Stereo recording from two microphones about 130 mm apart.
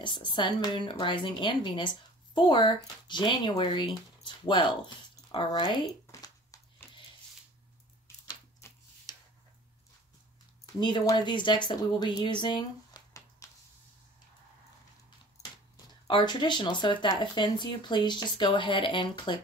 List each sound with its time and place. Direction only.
0.0 s a woman's voice: 40° left (ahead or behind)
8.6 s tick-tock: 20° left (ahead or behind)
10.8 s speech: 35° left (ahead or behind)
16.3 s a woman's voice: 35° left (ahead or behind)